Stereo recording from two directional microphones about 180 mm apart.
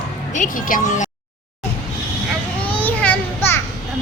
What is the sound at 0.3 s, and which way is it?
Speech, 45° left (ahead or behind).